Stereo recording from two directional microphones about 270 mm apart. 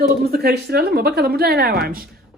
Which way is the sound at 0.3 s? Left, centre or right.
Right.